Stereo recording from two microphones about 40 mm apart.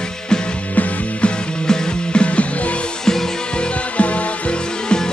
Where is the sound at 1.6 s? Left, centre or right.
Centre; by 2.7 s left.